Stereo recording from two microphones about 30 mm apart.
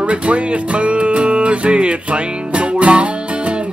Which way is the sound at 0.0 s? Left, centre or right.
Right.